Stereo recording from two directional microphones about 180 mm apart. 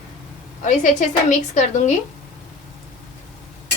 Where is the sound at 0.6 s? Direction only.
45° left (ahead or behind).